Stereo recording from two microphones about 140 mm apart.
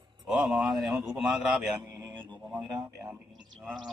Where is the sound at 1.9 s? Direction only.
20° right (ahead or behind).